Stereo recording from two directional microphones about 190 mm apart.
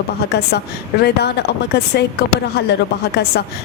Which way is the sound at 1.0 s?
60° left (ahead or behind).